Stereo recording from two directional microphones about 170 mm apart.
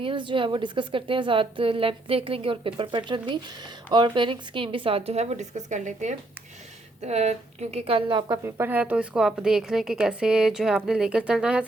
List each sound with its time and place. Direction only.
0.0 s a woman's voice: 30° right (ahead or behind)
8.4 s a woman's voice: 15° right (ahead or behind)